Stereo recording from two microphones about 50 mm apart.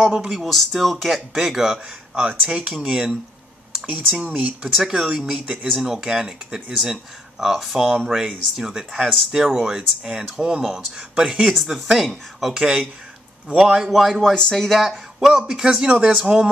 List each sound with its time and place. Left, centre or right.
0.0 s speech: centre
0.4 s speech: centre
2.1 s speech: right
4.2 s speech: right
4.7 s speech: centre
5.4 s speech: right
5.7 s speech: centre
12.5 s speech: centre
14.5 s speech: centre
14.8 s speech: centre
15.9 s speech: right